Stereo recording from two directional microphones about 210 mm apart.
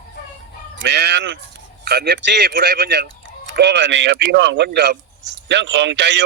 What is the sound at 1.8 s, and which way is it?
Speech, 50° right (ahead or behind).